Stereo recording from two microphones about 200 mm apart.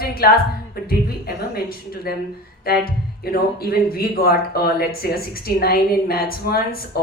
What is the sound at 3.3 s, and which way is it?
Speech, 50° left (ahead or behind).